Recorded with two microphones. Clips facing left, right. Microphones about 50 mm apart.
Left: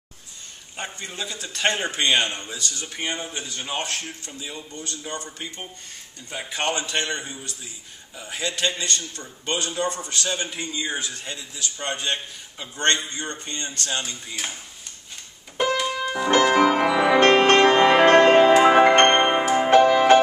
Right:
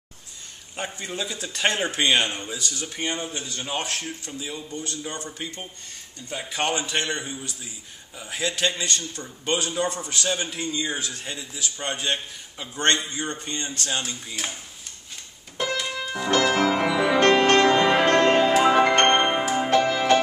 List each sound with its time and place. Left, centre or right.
0.7 s a man's voice: centre
3.0 s a man's voice: centre
4.8 s a man's voice: centre
6.7 s a man's voice: centre
11.2 s a man's voice: centre
15.6 s music: centre
16.3 s music: left